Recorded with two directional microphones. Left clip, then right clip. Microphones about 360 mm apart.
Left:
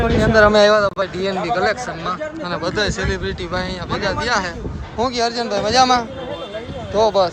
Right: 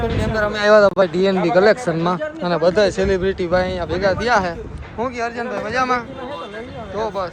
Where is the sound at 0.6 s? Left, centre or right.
Centre.